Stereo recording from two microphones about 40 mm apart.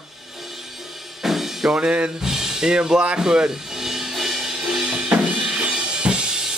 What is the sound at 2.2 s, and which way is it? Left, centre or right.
Speech, centre.